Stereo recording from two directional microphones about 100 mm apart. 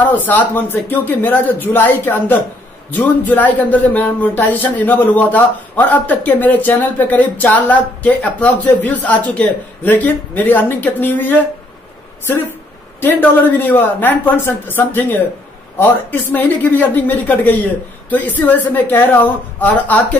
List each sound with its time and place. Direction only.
0.0 s speech: 15° left (ahead or behind)
13.0 s speech: 20° left (ahead or behind)